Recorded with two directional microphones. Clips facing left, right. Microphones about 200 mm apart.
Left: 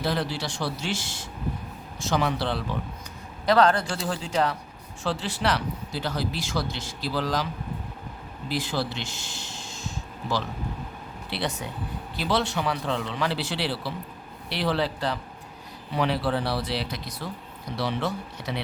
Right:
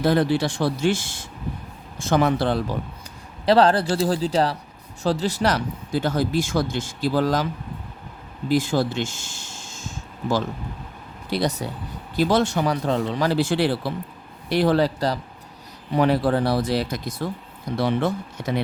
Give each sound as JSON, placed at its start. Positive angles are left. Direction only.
{"t": 0.0, "sound": "speech", "side_deg": -55}
{"t": 3.4, "sound": "a man's voice", "side_deg": -30}
{"t": 8.4, "sound": "a sound", "side_deg": -45}
{"t": 11.3, "sound": "a man's voice", "side_deg": -40}